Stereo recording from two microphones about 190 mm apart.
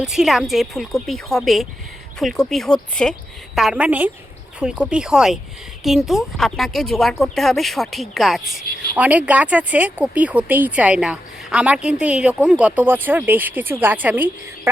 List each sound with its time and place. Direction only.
0.0 s a woman's voice: 5° right (ahead or behind)